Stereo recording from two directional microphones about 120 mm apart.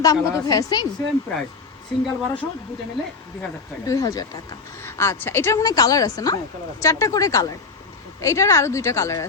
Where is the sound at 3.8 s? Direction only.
30° left (ahead or behind).